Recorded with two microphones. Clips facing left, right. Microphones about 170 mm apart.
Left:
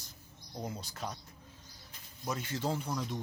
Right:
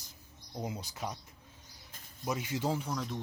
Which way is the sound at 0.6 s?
10° right (ahead or behind).